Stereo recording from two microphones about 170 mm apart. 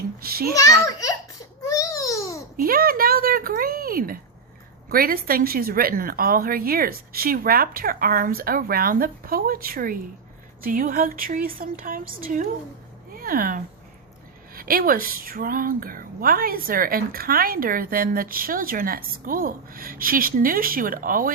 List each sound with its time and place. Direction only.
0.2 s a woman's voice: 60° right (ahead or behind)
0.9 s a child's voice: 20° left (ahead or behind)
1.6 s babbling: 20° left (ahead or behind)
2.6 s a sound: 60° right (ahead or behind)
4.9 s a woman's voice: 60° right (ahead or behind)